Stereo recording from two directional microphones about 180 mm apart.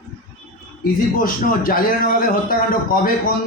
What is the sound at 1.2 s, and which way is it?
A man's voice, 50° left (ahead or behind).